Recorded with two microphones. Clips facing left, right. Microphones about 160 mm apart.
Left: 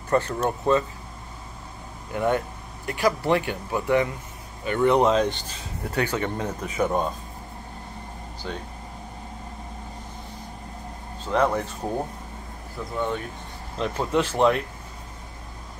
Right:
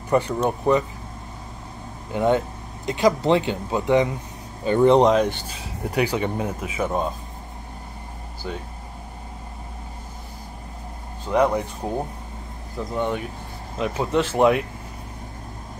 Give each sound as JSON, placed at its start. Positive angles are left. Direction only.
{"t": 0.1, "sound": "speech", "side_deg": -15}
{"t": 2.1, "sound": "speech", "side_deg": -20}
{"t": 5.0, "sound": "speech", "side_deg": -15}
{"t": 8.4, "sound": "speech", "side_deg": -10}
{"t": 11.3, "sound": "speech", "side_deg": -15}
{"t": 12.9, "sound": "speech", "side_deg": -15}
{"t": 13.7, "sound": "speech", "side_deg": -5}